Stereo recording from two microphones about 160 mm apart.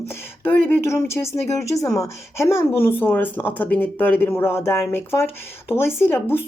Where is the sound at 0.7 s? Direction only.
15° left (ahead or behind).